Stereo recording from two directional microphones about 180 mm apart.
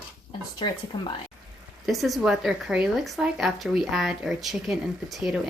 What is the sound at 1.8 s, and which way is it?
Speech, centre (ahead or behind).